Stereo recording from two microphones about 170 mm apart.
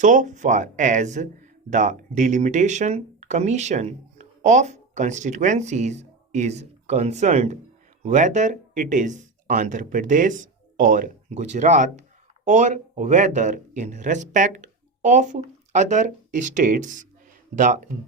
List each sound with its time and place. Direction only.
0.0 s speech: 50° right (ahead or behind)